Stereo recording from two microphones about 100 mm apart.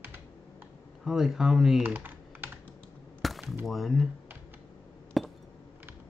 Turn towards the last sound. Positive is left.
turn(degrees=0)  # may be behind; listen again after turning